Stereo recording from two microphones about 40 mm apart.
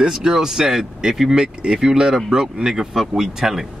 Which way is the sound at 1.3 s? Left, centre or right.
Centre.